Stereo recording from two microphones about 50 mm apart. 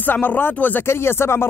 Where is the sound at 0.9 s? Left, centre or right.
Left.